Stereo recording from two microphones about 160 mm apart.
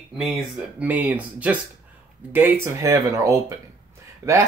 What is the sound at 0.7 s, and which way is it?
Speech, 10° right (ahead or behind).